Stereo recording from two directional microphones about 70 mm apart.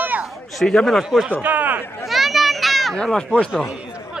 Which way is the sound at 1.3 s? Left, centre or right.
Right.